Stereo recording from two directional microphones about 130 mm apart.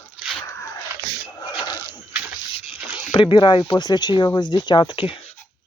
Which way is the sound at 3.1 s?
40° left (ahead or behind).